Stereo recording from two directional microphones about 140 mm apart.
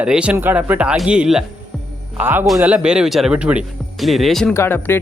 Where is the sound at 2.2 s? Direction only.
15° right (ahead or behind); by 4.5 s centre (ahead or behind).